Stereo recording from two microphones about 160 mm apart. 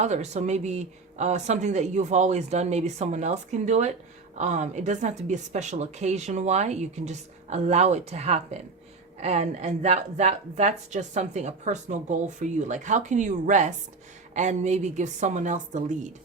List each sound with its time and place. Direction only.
0.0 s a woman's voice: 45° right (ahead or behind)